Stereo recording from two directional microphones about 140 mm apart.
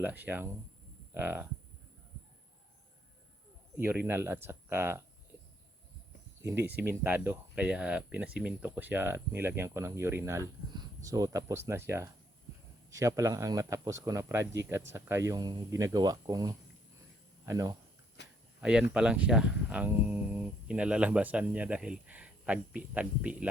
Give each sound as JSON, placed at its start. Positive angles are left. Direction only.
{"t": 0.0, "sound": "speech", "side_deg": -10}
{"t": 3.8, "sound": "speech", "side_deg": -15}
{"t": 6.4, "sound": "speech", "side_deg": -15}
{"t": 18.6, "sound": "speech", "side_deg": -5}